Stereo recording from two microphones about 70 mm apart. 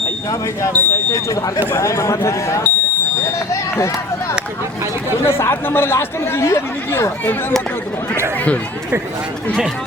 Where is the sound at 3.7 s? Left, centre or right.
Left.